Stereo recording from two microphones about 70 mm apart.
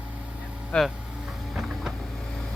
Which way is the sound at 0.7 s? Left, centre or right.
Centre.